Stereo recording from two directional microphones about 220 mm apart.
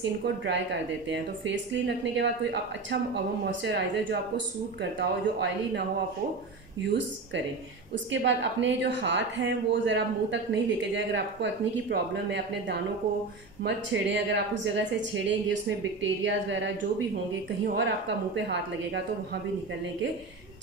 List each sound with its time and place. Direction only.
0.5 s a woman's voice: 55° right (ahead or behind)